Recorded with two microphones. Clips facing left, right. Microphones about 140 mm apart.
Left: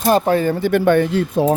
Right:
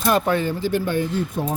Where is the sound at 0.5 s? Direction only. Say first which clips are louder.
Left 8 dB; 65° left (ahead or behind).